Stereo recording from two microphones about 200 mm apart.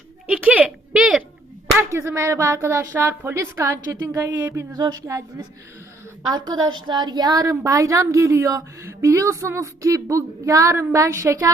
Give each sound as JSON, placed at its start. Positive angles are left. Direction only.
{"t": 0.3, "sound": "a sound", "side_deg": -5}
{"t": 1.9, "sound": "a woman's voice", "side_deg": -15}
{"t": 6.3, "sound": "a woman's voice", "side_deg": -20}